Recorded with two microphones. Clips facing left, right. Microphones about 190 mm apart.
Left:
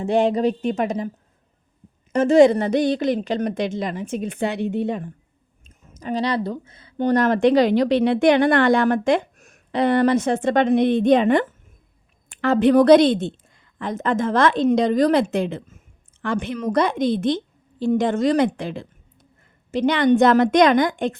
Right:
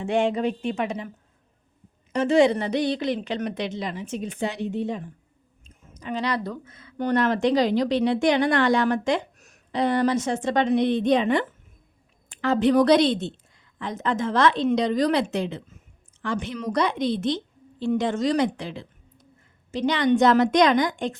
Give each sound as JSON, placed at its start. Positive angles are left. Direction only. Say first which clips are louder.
{"t": 0.0, "sound": "speech", "louder": "left 4 dB", "side_deg": 35}
{"t": 2.1, "sound": "a woman's voice", "louder": "left 5 dB", "side_deg": 45}
{"t": 5.6, "sound": "speech", "louder": "left 5 dB", "side_deg": 45}
{"t": 7.2, "sound": "a woman's voice", "louder": "left 5 dB", "side_deg": 55}